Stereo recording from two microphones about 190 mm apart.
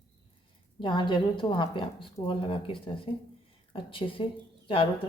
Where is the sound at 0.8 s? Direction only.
25° left (ahead or behind).